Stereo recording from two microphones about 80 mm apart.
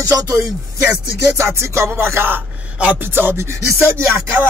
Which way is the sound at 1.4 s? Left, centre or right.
Right.